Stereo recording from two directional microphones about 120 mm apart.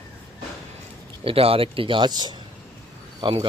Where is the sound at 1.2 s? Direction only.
50° right (ahead or behind).